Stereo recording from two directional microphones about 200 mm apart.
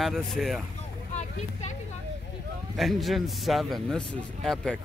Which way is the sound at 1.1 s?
35° left (ahead or behind).